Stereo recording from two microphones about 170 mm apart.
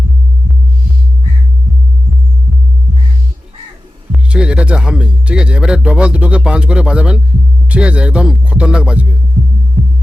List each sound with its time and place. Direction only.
4.1 s speech: 5° right (ahead or behind)
7.7 s music: 5° right (ahead or behind)